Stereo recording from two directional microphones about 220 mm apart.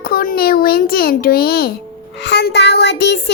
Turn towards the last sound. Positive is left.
turn(degrees=50)  # may be behind; listen again after turning